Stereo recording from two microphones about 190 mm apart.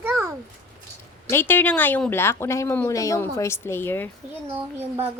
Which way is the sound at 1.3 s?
10° left (ahead or behind).